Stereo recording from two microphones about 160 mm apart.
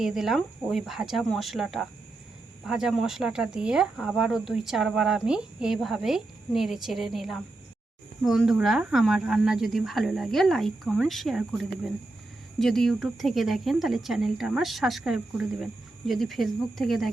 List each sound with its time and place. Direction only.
0.0 s speech: centre (ahead or behind)